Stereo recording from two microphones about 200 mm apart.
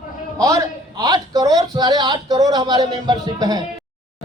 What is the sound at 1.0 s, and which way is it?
Speech, 20° right (ahead or behind).